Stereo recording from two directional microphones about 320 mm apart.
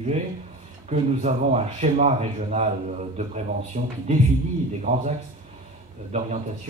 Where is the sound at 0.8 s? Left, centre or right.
Right.